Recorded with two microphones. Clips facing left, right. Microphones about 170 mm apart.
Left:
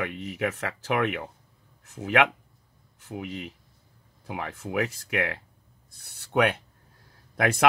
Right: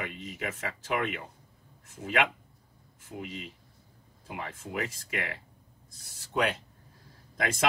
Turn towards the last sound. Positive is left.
turn(degrees=65)  # may be behind; listen again after turning